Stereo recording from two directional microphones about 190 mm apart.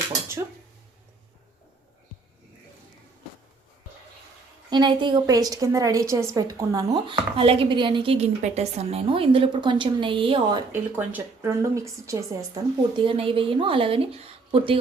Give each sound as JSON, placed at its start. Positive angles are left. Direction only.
{"t": 0.1, "sound": "a sound", "side_deg": -15}
{"t": 4.7, "sound": "a woman's voice", "side_deg": -25}
{"t": 10.7, "sound": "speech", "side_deg": -10}
{"t": 13.0, "sound": "a woman's voice", "side_deg": -25}